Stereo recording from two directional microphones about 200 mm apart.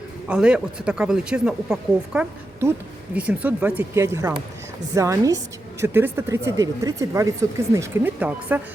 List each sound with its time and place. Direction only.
0.3 s speech: 5° right (ahead or behind)